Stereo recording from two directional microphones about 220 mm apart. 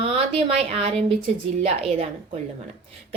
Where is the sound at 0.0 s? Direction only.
25° right (ahead or behind).